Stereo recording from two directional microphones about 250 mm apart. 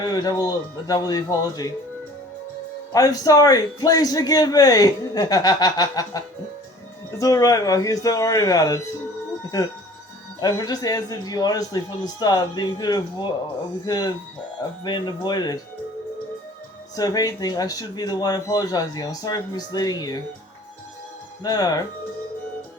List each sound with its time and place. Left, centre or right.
0.0 s speech: centre
2.9 s speech: centre
10.4 s speech: centre
16.9 s speech: centre
21.4 s speech: centre